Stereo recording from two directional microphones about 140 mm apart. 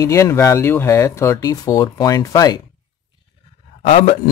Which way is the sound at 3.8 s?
45° left (ahead or behind).